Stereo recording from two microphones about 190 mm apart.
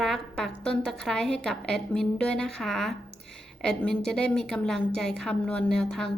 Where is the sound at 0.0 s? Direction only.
Centre (ahead or behind).